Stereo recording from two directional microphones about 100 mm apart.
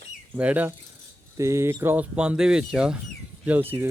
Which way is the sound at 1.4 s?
25° right (ahead or behind).